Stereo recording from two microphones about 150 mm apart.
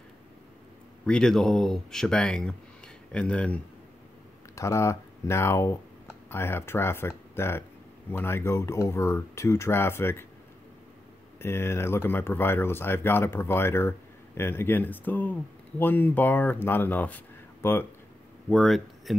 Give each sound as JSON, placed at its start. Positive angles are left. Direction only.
{"t": 1.0, "sound": "speech", "side_deg": 5}
{"t": 4.6, "sound": "speech", "side_deg": 20}
{"t": 11.3, "sound": "speech", "side_deg": 15}
{"t": 18.5, "sound": "speech", "side_deg": 0}